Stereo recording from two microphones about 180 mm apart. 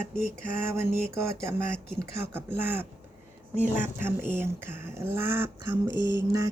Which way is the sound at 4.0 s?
10° right (ahead or behind).